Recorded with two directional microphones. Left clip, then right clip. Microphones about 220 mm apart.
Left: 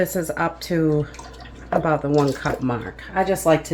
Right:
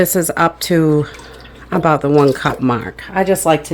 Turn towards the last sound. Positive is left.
turn(degrees=-45)  # may be behind; listen again after turning